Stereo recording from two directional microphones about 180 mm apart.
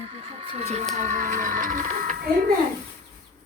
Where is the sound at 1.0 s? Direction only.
45° right (ahead or behind).